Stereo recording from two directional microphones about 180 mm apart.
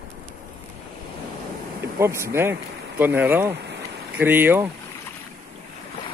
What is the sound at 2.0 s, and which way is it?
Speech, 15° right (ahead or behind).